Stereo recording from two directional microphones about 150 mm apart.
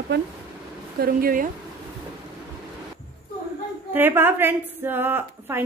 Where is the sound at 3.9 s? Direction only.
15° right (ahead or behind).